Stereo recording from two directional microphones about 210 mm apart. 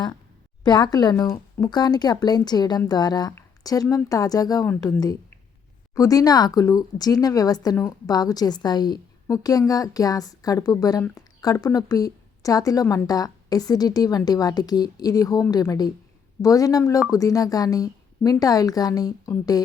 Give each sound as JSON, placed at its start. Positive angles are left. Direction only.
{"t": 0.6, "sound": "speech", "side_deg": 20}